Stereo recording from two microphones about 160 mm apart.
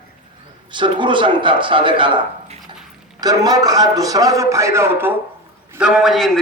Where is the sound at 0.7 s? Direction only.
30° right (ahead or behind).